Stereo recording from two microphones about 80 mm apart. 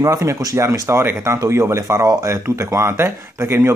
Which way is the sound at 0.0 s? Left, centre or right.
Right.